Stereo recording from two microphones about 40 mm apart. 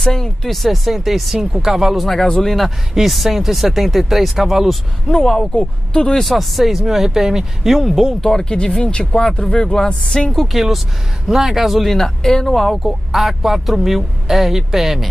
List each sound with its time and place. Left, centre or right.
0.0 s speech: centre
0.6 s speech: centre
2.4 s speech: centre
5.0 s speech: centre
6.1 s speech: centre
8.2 s speech: centre
8.5 s speech: left
10.4 s speech: centre
11.9 s speech: centre
13.1 s speech: centre